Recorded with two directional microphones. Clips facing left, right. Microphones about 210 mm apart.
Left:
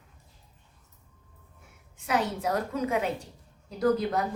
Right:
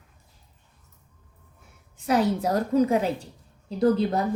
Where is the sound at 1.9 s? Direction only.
35° right (ahead or behind).